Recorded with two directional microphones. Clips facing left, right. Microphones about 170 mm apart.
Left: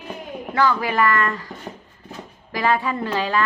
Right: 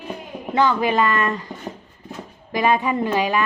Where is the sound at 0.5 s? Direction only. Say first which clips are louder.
Right 2 dB; 20° right (ahead or behind).